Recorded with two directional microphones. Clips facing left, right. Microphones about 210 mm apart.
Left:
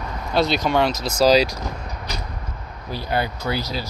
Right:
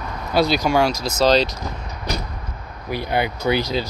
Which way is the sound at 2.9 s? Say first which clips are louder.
Right 2 dB; 15° right (ahead or behind).